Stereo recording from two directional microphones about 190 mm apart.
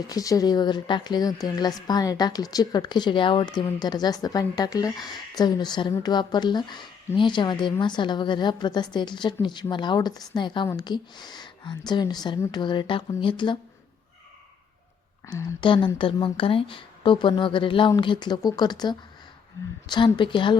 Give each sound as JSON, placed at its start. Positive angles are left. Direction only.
{"t": 0.1, "sound": "a woman's voice", "side_deg": 20}
{"t": 15.3, "sound": "a woman's voice", "side_deg": 25}